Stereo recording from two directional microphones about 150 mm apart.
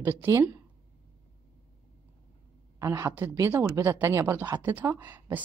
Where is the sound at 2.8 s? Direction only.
20° right (ahead or behind).